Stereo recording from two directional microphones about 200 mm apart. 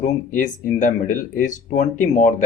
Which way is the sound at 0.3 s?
40° left (ahead or behind).